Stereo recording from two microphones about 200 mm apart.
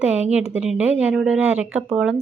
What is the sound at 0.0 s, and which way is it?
A woman's voice, 5° right (ahead or behind).